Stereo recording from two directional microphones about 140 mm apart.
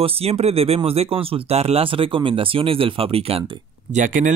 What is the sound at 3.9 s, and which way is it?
Speech, 65° right (ahead or behind).